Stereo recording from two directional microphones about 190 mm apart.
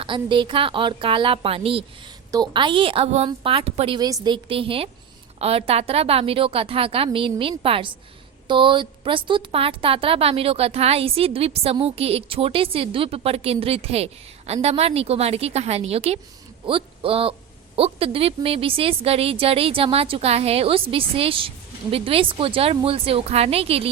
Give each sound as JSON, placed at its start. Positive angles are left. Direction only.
{"t": 0.0, "sound": "a woman's voice", "side_deg": -25}